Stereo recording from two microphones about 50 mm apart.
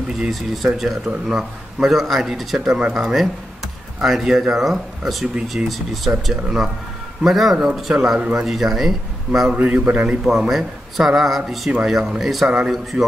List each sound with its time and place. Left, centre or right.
0.3 s a man's voice: centre
9.6 s a man's voice: right
10.5 s a man's voice: centre
12.2 s a man's voice: centre
12.4 s speech: centre